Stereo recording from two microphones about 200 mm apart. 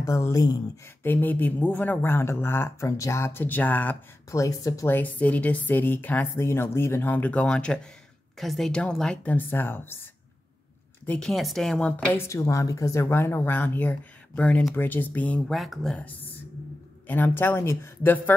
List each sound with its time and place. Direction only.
0.0 s a woman's voice: 15° left (ahead or behind)
11.1 s a woman's voice: centre (ahead or behind)